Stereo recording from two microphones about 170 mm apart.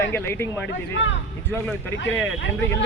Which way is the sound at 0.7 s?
90° left.